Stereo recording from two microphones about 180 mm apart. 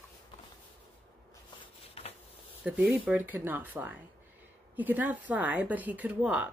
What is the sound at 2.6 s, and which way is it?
Speech, 5° right (ahead or behind).